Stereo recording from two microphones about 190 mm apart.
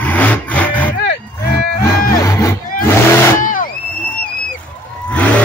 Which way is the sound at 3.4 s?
45° left (ahead or behind).